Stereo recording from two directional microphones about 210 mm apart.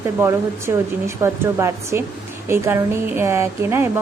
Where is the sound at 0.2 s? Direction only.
10° right (ahead or behind).